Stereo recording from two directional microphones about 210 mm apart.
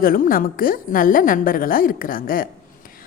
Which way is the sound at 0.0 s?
45° left (ahead or behind).